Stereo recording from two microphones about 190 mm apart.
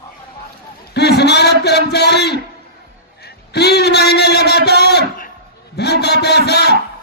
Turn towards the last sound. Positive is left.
turn(degrees=60)  # may be behind; listen again after turning